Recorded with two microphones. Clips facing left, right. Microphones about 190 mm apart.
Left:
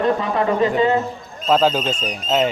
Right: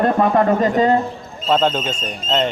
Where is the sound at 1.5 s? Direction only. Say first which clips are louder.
Left 1 dB; 5° left (ahead or behind).